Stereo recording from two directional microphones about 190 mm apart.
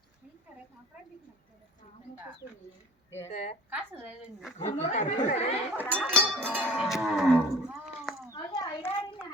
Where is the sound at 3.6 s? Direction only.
10° right (ahead or behind).